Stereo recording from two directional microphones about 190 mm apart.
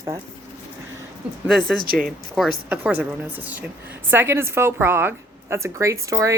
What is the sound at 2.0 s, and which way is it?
A woman's voice, centre (ahead or behind).